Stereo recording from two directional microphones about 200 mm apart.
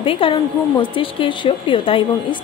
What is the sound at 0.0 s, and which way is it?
A woman's voice, 25° left (ahead or behind).